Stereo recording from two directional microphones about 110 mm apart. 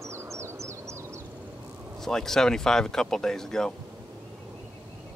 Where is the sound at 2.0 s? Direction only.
5° left (ahead or behind).